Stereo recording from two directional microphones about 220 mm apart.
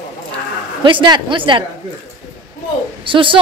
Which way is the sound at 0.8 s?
20° right (ahead or behind).